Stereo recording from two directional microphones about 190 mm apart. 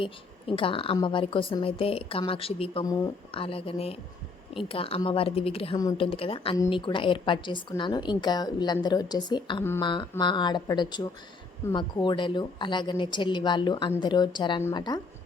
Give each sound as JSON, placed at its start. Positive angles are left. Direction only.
{"t": 0.0, "sound": "a woman's voice", "side_deg": 25}
{"t": 2.8, "sound": "a woman's voice", "side_deg": 20}
{"t": 5.7, "sound": "a woman's voice", "side_deg": 20}
{"t": 6.1, "sound": "a woman's voice", "side_deg": 30}